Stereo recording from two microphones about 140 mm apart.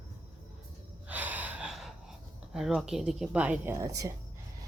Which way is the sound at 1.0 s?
10° right (ahead or behind).